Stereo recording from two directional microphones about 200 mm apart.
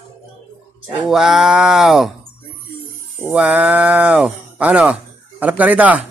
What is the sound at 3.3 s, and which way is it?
Speech, 10° right (ahead or behind).